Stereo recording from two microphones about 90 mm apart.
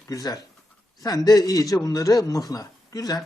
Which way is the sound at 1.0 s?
45° left (ahead or behind).